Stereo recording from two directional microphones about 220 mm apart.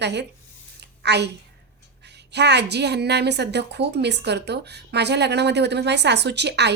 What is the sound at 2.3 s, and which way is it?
A woman's voice, 50° right (ahead or behind).